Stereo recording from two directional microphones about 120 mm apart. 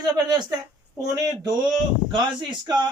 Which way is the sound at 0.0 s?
35° right (ahead or behind).